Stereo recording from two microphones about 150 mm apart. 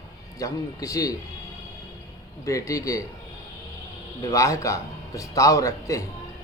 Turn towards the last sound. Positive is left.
turn(degrees=20)  # may be behind; listen again after turning